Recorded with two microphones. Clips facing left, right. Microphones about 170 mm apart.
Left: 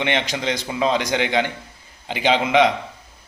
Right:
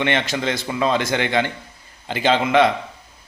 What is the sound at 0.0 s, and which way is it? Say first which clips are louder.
A man's voice: right 1 dB; 15° left (ahead or behind).